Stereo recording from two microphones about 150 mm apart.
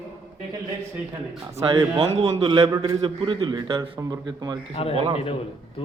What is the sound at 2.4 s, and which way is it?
Speech, 30° right (ahead or behind).